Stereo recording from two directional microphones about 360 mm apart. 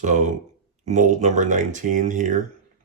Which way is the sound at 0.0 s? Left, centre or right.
Right.